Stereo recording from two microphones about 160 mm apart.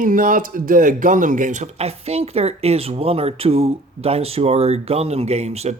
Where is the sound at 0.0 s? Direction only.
60° right (ahead or behind); by 5.7 s 40° right (ahead or behind).